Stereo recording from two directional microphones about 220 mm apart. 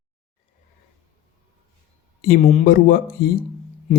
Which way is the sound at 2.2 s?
40° left (ahead or behind).